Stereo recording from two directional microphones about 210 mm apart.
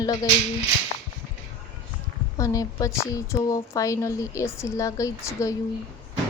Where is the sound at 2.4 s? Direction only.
15° left (ahead or behind).